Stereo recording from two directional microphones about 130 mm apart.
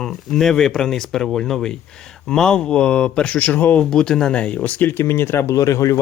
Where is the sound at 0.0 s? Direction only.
5° left (ahead or behind).